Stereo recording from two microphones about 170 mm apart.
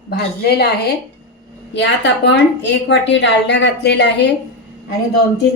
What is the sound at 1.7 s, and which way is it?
A woman's voice, 90° left.